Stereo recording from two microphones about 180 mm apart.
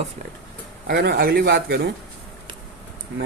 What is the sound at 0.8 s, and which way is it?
Speech, 60° right (ahead or behind).